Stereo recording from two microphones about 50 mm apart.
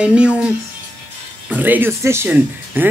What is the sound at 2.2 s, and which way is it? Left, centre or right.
Speech, right.